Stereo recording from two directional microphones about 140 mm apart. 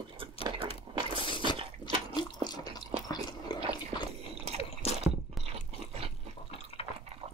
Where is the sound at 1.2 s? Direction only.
35° left (ahead or behind).